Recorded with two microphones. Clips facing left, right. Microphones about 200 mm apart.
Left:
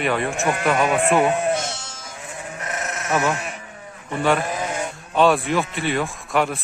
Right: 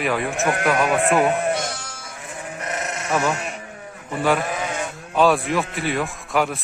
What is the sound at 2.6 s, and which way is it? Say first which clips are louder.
Sheep: right 1 dB; centre (ahead or behind).